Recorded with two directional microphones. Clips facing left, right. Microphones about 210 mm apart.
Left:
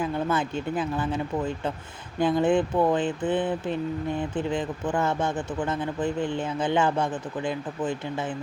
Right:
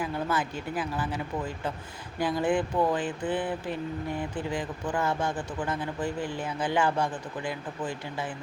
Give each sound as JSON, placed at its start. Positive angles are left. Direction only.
{"t": 0.0, "sound": "a man's voice", "side_deg": 25}